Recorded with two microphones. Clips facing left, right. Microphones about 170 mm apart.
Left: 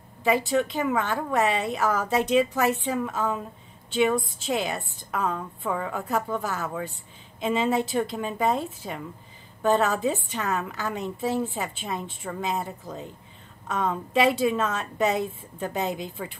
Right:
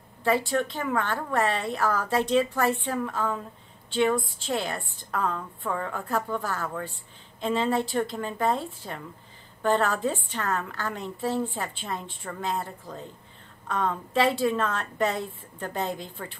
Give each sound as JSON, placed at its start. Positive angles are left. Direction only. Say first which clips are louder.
{"t": 0.2, "sound": "a woman's voice", "louder": "left 2 dB", "side_deg": 15}